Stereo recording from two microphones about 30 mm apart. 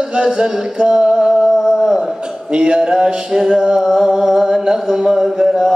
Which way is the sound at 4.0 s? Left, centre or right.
Right.